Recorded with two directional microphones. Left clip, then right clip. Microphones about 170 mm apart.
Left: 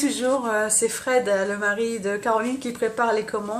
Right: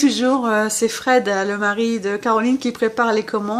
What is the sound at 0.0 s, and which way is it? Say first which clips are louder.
Speech: right 5 dB; 45° right (ahead or behind).